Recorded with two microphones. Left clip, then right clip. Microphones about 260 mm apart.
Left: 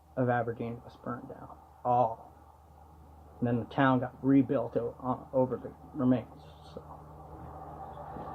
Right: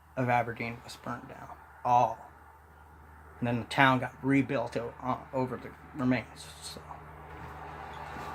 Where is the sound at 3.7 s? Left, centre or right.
Centre.